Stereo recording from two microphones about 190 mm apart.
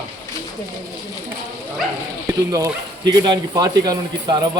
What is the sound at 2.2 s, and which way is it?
Speech, 15° right (ahead or behind).